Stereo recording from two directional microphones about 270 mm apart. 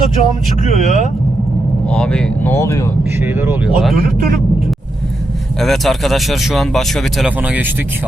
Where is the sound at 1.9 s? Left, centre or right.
Centre.